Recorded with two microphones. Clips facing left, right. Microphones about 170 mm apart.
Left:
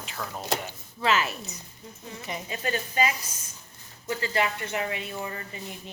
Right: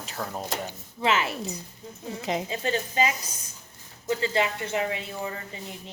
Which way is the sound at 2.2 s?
90° right.